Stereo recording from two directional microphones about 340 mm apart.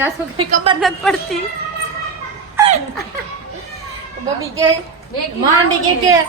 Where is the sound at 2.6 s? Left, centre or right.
Centre.